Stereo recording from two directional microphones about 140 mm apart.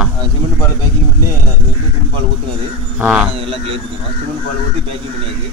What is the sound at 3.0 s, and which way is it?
Speech, 5° right (ahead or behind).